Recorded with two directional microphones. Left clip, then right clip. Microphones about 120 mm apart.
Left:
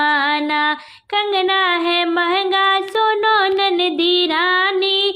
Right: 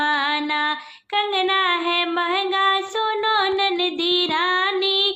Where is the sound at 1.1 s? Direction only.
45° left (ahead or behind).